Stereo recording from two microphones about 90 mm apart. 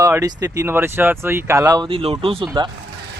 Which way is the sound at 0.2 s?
45° right (ahead or behind).